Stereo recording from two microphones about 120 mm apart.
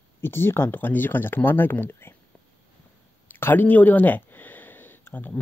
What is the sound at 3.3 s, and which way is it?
Speech, 15° left (ahead or behind).